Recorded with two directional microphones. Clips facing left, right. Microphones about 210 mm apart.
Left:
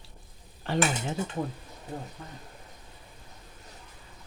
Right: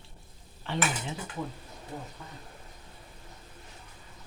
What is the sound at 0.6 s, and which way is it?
Speech, 45° left (ahead or behind).